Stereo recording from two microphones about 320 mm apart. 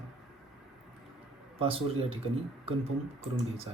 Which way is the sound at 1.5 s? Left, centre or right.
Centre.